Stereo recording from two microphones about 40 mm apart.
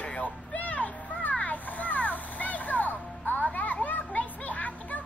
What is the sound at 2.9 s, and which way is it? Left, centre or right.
Music, left.